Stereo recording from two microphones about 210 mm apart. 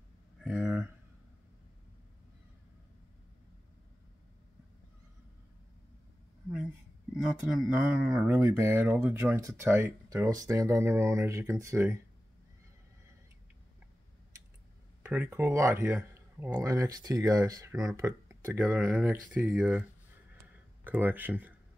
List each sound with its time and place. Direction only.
0.4 s a sound: 5° right (ahead or behind)
7.6 s speech: 5° right (ahead or behind)
15.0 s speech: 10° right (ahead or behind)
20.8 s speech: 10° right (ahead or behind)